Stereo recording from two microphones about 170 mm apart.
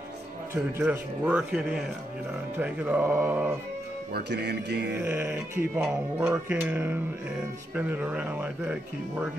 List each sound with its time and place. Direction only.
0.7 s mantra: 10° right (ahead or behind)
4.1 s music: 75° right (ahead or behind)
4.9 s mantra: 10° right (ahead or behind)